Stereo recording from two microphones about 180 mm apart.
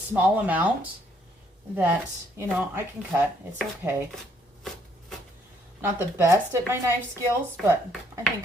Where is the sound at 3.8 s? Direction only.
15° right (ahead or behind).